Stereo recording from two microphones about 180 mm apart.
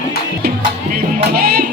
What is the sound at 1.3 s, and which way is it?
Music, 55° right (ahead or behind).